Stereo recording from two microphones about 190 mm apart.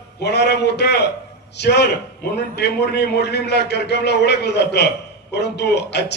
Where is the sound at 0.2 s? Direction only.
60° left (ahead or behind).